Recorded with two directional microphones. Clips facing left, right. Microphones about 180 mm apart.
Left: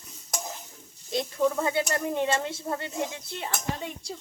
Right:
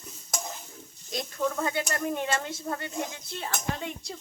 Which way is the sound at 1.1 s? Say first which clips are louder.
Left 5 dB; 25° left (ahead or behind).